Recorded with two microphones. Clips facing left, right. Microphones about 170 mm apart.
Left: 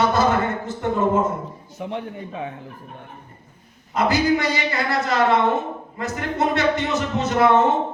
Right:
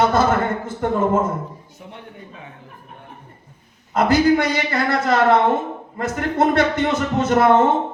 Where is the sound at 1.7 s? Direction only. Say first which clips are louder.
Left 9 dB; 90° left.